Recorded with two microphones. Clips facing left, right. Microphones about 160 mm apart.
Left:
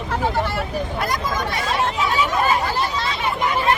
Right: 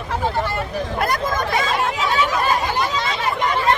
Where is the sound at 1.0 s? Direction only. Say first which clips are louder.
Right 5 dB; 50° right (ahead or behind).